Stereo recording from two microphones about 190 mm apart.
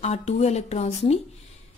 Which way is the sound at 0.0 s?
35° left (ahead or behind).